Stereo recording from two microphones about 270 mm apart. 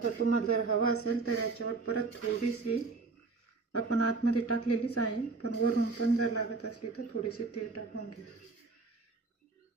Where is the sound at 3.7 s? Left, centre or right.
Left.